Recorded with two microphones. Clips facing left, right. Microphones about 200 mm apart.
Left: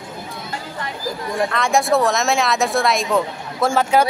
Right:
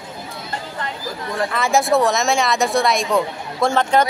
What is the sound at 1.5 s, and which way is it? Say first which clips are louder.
Speech: right 1 dB; centre (ahead or behind).